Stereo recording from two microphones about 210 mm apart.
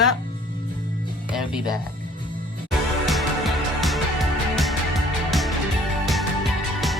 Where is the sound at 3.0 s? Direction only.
Centre (ahead or behind).